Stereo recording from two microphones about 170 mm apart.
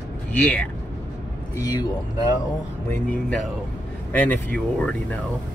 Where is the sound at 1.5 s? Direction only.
20° left (ahead or behind).